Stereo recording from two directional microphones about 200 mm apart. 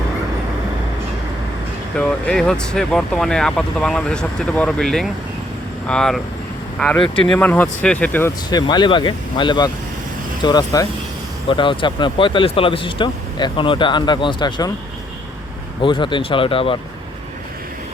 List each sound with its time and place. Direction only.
2.0 s speech: 5° left (ahead or behind)
8.4 s speech: 20° left (ahead or behind)
15.8 s speech: 25° left (ahead or behind)